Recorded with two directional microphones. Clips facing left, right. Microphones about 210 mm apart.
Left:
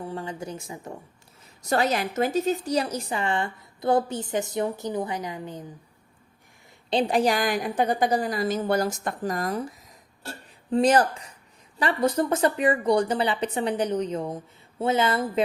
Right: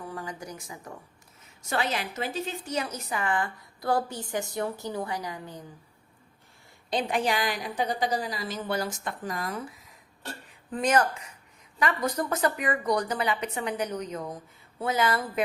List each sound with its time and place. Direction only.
0.0 s a woman's voice: 25° left (ahead or behind)
1.6 s a woman's voice: 40° left (ahead or behind); by 5.6 s 20° left (ahead or behind)
6.9 s a woman's voice: 35° left (ahead or behind)